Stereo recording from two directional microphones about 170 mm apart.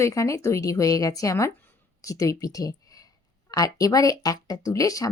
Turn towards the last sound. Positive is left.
turn(degrees=20)  # may be behind; listen again after turning